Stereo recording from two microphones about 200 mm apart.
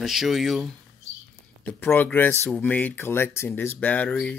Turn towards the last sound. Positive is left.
turn(degrees=5)  # may be behind; listen again after turning